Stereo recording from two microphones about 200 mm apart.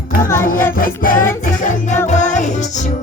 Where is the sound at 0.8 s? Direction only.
45° left (ahead or behind).